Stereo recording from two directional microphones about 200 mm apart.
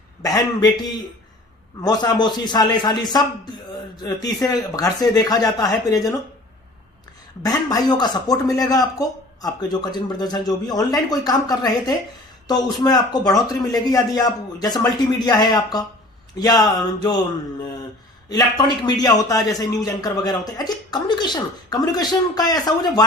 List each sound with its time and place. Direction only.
0.2 s speech: 20° left (ahead or behind)
1.8 s a man's voice: 20° left (ahead or behind)
7.4 s a man's voice: 20° left (ahead or behind)
18.3 s a man's voice: 20° left (ahead or behind)